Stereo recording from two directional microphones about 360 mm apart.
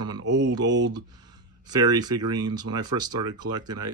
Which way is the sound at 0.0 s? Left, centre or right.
Right.